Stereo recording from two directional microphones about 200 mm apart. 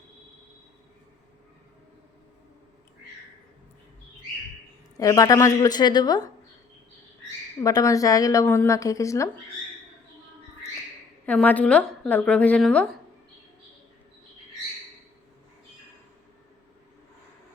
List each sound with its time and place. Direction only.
4.9 s a woman's voice: 15° left (ahead or behind)
7.6 s a woman's voice: 15° left (ahead or behind)
11.3 s a woman's voice: 5° left (ahead or behind)